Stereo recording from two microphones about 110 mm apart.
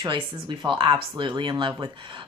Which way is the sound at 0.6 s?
45° right (ahead or behind).